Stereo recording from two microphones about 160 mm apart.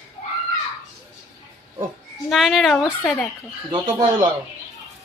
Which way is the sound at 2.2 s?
Centre (ahead or behind).